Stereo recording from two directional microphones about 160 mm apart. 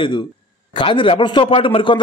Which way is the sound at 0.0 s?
30° left (ahead or behind).